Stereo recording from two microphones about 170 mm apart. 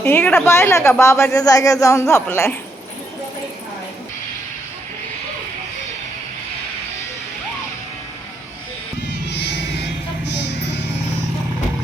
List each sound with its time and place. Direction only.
0.0 s a woman's voice: 10° left (ahead or behind)
9.2 s insect: 85° left
10.4 s music: 90° left